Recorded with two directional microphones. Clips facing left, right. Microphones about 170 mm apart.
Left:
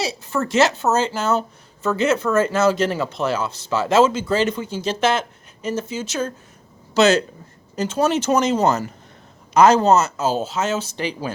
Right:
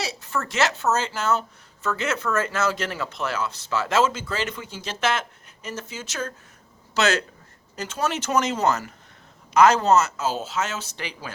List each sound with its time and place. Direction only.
0.0 s speech: 30° left (ahead or behind)